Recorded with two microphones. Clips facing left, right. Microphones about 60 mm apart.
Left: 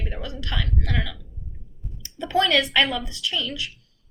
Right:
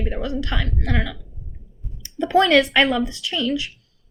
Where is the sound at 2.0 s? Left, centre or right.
Right.